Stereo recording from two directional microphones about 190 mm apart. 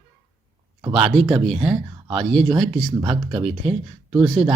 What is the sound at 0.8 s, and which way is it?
Speech, 30° right (ahead or behind).